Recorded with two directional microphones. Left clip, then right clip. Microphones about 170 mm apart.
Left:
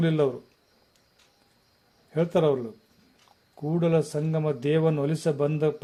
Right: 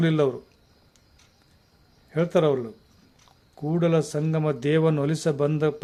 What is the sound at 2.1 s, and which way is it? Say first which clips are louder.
A man's voice: right 2 dB; 20° right (ahead or behind).